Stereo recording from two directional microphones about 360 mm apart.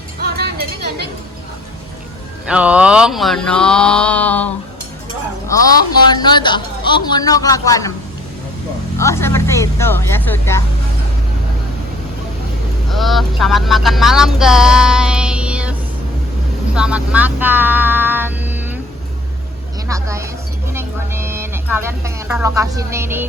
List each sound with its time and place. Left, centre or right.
0.2 s music: right
2.5 s mantra: centre
6.1 s speech: centre
9.0 s speech: centre
12.9 s music: centre
16.7 s speech: centre
19.9 s speech: centre